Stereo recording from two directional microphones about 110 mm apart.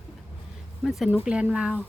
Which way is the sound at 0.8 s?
Centre (ahead or behind).